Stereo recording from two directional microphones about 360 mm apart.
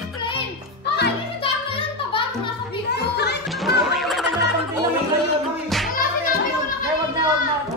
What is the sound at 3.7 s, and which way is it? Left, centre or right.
Music, centre.